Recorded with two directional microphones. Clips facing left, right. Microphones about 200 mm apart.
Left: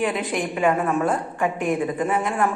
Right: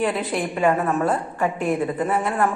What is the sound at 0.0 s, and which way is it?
A woman's voice, centre (ahead or behind).